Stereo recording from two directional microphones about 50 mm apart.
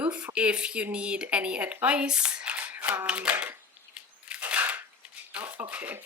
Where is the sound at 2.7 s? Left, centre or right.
Right.